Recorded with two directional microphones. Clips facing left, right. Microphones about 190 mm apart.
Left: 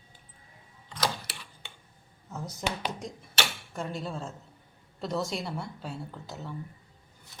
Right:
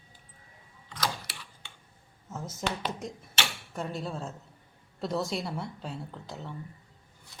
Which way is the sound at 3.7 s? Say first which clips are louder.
Even; centre (ahead or behind).